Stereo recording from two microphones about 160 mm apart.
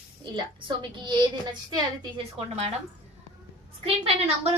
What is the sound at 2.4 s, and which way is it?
Speech, 40° right (ahead or behind).